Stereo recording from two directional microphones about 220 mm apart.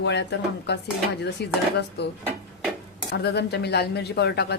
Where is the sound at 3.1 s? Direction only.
50° left (ahead or behind).